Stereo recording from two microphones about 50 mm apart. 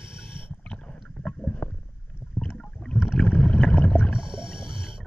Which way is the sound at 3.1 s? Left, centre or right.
Left.